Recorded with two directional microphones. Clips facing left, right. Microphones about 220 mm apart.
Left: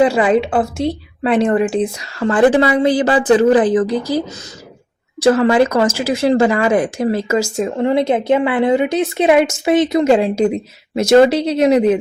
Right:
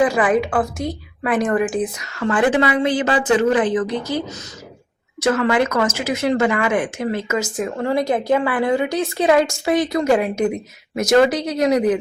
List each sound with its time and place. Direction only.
0.0 s a woman's voice: 25° left (ahead or behind)
5.2 s speech: 30° left (ahead or behind)
7.7 s a woman's voice: 20° left (ahead or behind)